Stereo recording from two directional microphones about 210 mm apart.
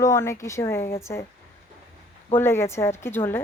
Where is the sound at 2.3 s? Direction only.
10° left (ahead or behind).